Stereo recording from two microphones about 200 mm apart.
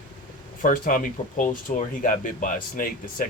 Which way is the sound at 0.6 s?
45° left (ahead or behind).